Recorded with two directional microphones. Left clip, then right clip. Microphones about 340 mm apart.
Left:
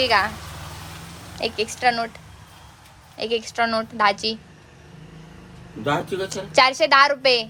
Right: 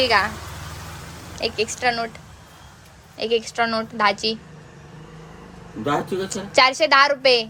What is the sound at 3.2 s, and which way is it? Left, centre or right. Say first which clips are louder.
Speech: right 1 dB; centre.